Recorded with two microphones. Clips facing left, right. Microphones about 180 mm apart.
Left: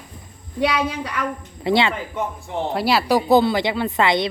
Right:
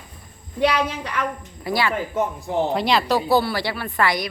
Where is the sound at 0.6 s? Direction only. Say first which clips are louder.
Even; 5° left (ahead or behind).